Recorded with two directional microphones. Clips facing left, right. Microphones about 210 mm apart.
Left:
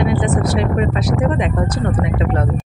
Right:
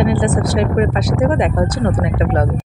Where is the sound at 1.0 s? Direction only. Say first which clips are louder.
Right 2 dB; 50° right (ahead or behind).